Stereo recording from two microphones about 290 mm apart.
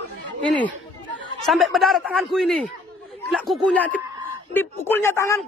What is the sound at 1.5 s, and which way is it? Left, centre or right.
Speech, centre.